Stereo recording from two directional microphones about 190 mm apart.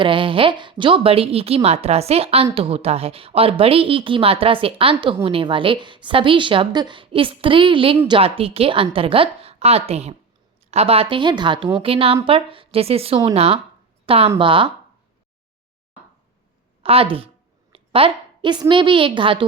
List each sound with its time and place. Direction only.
0.0 s speech: 25° right (ahead or behind)
16.8 s a woman's voice: 30° right (ahead or behind)